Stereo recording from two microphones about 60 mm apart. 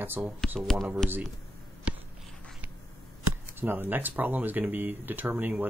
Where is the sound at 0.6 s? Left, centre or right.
Centre.